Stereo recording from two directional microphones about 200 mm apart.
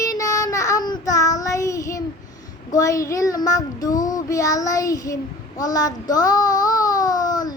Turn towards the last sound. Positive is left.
turn(degrees=20)  # may be behind; listen again after turning